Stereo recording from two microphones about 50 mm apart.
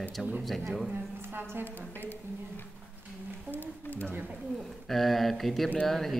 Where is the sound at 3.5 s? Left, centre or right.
Left.